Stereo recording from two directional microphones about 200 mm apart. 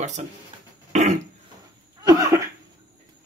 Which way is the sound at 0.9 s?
35° right (ahead or behind).